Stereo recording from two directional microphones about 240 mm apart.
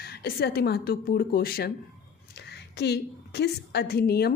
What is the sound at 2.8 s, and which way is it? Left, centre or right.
A woman's voice, left.